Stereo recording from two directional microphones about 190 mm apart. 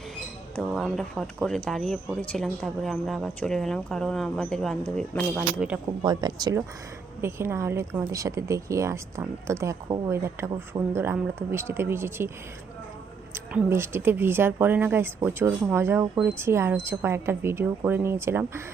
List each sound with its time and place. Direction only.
0.8 s speech: centre (ahead or behind)
6.0 s a woman's voice: 20° right (ahead or behind)
13.3 s a woman's voice: 10° right (ahead or behind)